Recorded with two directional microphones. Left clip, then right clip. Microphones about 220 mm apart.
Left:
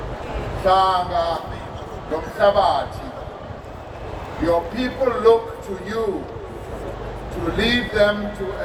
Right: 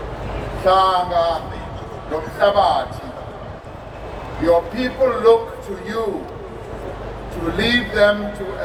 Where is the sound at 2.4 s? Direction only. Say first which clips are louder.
Right 1 dB; 35° right (ahead or behind).